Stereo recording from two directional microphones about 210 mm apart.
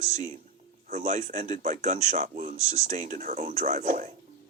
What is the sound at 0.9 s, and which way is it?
A man's voice, 35° right (ahead or behind).